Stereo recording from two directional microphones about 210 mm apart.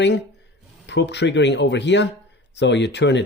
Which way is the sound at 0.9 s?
55° left (ahead or behind).